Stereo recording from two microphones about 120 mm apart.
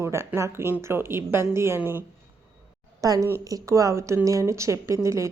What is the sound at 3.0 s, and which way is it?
Speech, 30° right (ahead or behind).